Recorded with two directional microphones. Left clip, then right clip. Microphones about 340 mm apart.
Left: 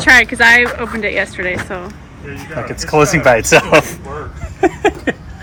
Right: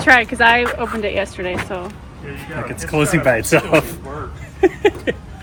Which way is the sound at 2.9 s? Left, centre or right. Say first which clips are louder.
Left 6 dB; centre.